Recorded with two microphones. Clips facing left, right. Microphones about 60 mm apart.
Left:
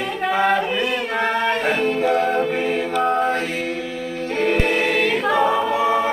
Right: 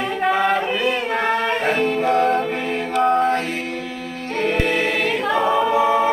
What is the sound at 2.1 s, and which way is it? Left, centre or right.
Music, centre.